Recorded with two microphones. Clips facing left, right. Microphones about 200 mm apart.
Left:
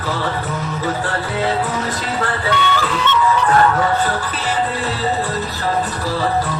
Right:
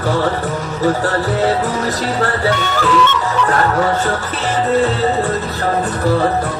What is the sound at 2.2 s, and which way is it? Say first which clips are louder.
Music: even; 45° right (ahead or behind).